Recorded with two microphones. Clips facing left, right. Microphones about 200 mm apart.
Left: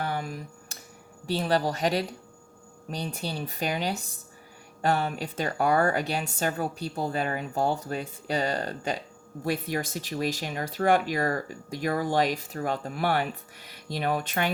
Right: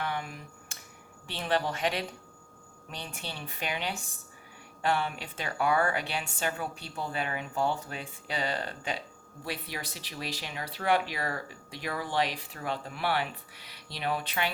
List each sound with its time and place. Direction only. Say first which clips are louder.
0.0 s finger snapping: left 4 dB; 40° left (ahead or behind)
1.3 s a woman's voice: left 5 dB; 40° left (ahead or behind)